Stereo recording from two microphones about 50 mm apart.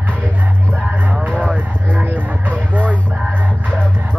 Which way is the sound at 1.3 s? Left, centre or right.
Centre.